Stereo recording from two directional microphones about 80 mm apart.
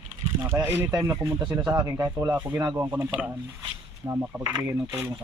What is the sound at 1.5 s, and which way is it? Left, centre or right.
Speech, centre.